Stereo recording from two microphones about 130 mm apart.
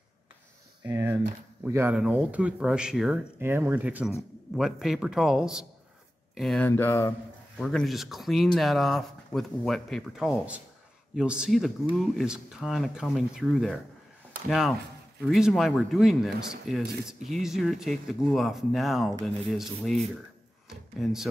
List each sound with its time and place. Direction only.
0.8 s speech: 25° right (ahead or behind); by 3.2 s 5° right (ahead or behind)
3.3 s speech: 15° right (ahead or behind); by 6.6 s centre (ahead or behind)
6.6 s speech: 20° left (ahead or behind)
7.5 s speech: centre (ahead or behind)
21.0 s speech: centre (ahead or behind)